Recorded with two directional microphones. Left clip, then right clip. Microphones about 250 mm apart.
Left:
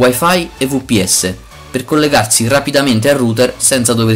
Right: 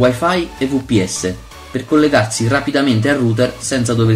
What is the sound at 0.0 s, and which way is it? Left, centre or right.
Speech, left.